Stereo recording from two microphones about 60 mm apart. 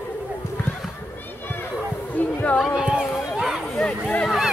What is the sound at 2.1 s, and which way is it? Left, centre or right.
Music, left.